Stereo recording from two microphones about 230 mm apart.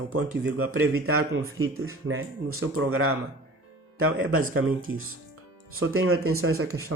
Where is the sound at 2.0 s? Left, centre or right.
Right.